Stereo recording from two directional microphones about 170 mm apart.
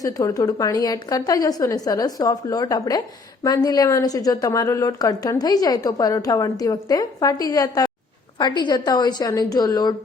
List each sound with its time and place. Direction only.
0.0 s a woman's voice: 20° left (ahead or behind)